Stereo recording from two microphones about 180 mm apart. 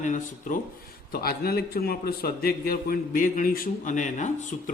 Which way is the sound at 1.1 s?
60° left (ahead or behind).